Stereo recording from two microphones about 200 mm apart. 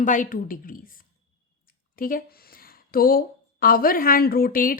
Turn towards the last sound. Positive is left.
turn(degrees=45)  # may be behind; listen again after turning